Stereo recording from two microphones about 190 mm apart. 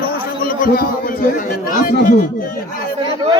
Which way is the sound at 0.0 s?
50° left (ahead or behind).